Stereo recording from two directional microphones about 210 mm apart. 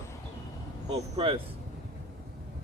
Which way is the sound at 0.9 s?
25° right (ahead or behind).